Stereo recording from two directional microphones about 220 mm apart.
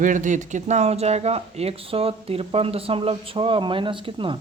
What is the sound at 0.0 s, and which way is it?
Speech, 35° right (ahead or behind).